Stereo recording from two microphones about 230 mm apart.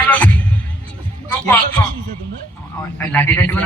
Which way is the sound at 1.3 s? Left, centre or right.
Centre.